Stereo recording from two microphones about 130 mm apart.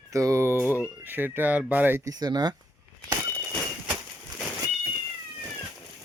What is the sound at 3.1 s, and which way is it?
Walk, 30° right (ahead or behind).